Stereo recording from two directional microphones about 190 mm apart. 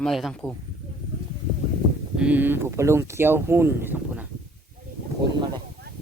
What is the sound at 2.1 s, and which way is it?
Speech, 5° right (ahead or behind).